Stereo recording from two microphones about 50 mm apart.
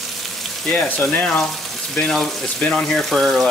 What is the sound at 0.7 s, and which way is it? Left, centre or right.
Speech, left.